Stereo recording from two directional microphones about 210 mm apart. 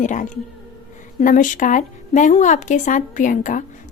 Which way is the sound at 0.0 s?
35° left (ahead or behind).